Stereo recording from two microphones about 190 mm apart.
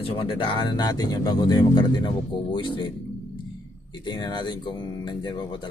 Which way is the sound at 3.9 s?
25° left (ahead or behind).